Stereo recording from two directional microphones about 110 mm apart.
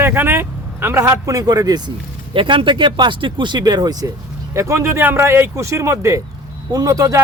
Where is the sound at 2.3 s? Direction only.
50° right (ahead or behind).